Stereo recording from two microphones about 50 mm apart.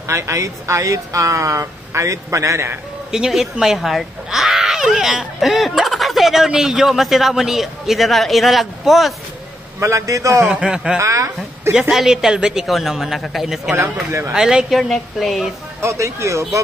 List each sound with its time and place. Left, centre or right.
0.1 s speech: right
3.1 s speech: centre
9.8 s a man's voice: right
10.4 s speech: centre
11.0 s speech: right
11.9 s speech: centre
12.6 s speech: centre
13.7 s speech: right
14.3 s speech: centre
14.7 s speech: centre
15.8 s speech: right